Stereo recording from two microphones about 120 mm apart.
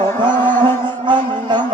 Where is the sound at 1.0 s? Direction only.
40° right (ahead or behind).